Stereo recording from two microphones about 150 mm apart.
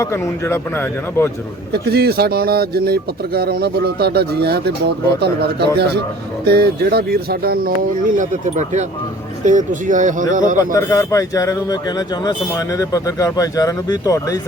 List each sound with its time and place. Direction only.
0.0 s a man's voice: 15° left (ahead or behind)
1.7 s speech: 90° right
8.1 s speech: 55° right (ahead or behind)
10.6 s a man's voice: 20° left (ahead or behind)